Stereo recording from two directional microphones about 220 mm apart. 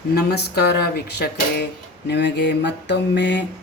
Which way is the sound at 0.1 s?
45° left (ahead or behind).